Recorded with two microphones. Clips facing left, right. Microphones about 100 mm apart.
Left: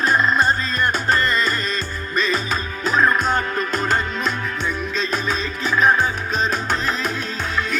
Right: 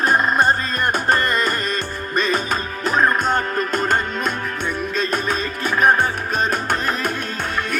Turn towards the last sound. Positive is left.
turn(degrees=-55)  # may be behind; listen again after turning